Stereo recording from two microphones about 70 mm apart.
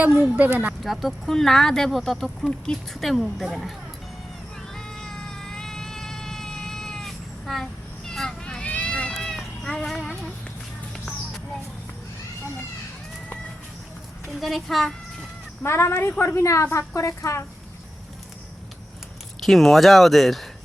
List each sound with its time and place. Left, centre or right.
0.0 s speech: right
0.9 s speech: centre
4.7 s cat: centre
8.7 s run: centre
9.1 s cat: centre
14.3 s speech: centre
15.6 s a woman's voice: left
19.4 s speech: centre